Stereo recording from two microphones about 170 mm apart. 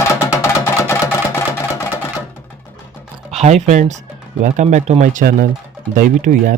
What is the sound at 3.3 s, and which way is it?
Speech, 40° right (ahead or behind).